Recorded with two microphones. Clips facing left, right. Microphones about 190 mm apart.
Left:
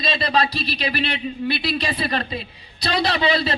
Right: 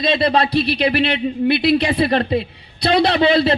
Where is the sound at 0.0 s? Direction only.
55° right (ahead or behind).